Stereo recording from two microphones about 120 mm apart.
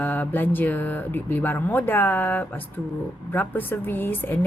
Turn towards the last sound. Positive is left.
turn(degrees=15)  # may be behind; listen again after turning